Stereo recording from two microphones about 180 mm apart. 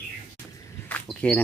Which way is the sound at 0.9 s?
5° left (ahead or behind).